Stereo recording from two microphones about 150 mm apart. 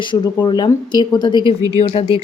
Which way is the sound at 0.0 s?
30° left (ahead or behind).